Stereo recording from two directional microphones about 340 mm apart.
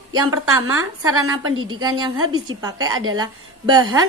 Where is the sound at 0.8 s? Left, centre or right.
Right.